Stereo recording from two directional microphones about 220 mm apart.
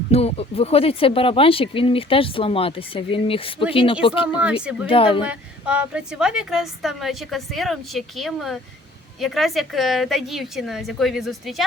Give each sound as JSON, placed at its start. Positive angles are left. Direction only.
{"t": 0.1, "sound": "speech", "side_deg": 30}
{"t": 4.3, "sound": "a woman's voice", "side_deg": -5}
{"t": 4.9, "sound": "speech", "side_deg": 25}
{"t": 5.2, "sound": "a woman's voice", "side_deg": -5}